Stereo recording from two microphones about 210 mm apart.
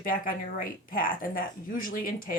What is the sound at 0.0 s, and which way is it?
Speech, 40° left (ahead or behind).